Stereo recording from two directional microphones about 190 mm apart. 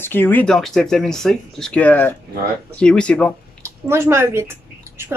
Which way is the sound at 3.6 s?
15° right (ahead or behind).